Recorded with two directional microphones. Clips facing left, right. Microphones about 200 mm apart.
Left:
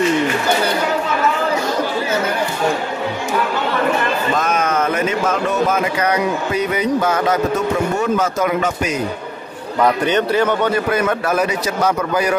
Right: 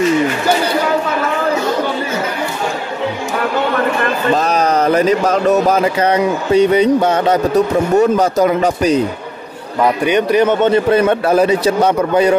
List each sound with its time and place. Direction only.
4.4 s speech: 35° right (ahead or behind)
9.8 s a man's voice: 10° right (ahead or behind); by 12.4 s 25° right (ahead or behind)